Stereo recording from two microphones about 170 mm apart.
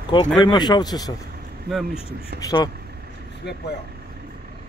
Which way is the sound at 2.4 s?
20° left (ahead or behind).